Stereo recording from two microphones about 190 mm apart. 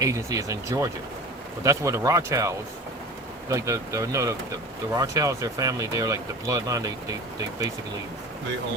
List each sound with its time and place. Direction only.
0.0 s speech: 15° right (ahead or behind)